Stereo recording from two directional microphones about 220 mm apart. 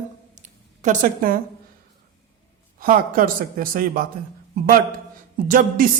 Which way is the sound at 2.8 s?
40° right (ahead or behind).